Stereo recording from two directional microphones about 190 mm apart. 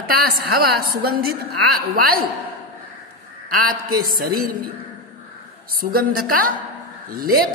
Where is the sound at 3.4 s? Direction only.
50° right (ahead or behind).